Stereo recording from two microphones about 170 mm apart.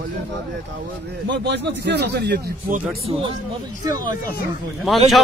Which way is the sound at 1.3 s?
90° right.